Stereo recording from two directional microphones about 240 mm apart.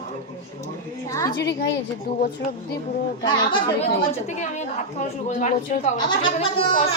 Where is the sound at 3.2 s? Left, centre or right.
Centre.